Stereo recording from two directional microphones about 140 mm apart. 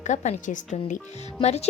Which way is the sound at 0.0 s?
60° left (ahead or behind).